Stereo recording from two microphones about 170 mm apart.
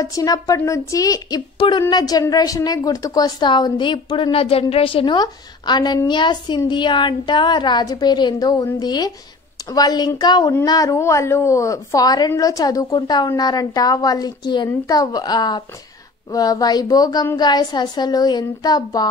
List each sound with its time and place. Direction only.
0.0 s a woman's voice: 20° left (ahead or behind)